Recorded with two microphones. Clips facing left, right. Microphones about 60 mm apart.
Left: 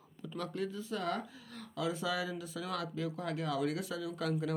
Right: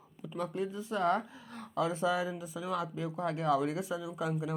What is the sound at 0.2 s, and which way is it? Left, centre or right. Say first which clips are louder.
Speech: right 3 dB; centre.